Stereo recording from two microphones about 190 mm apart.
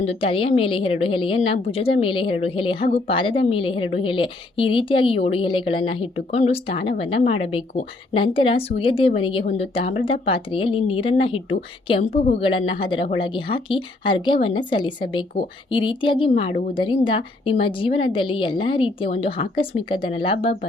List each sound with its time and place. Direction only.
0.0 s a woman's voice: 30° left (ahead or behind)